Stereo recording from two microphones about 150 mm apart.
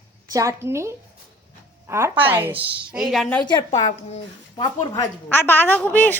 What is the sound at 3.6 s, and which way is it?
Speech, 45° left (ahead or behind).